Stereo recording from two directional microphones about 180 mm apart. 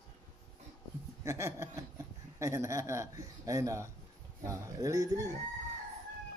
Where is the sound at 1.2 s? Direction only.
15° right (ahead or behind).